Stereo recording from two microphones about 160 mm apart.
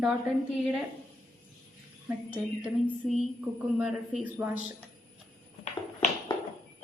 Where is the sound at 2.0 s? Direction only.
5° right (ahead or behind).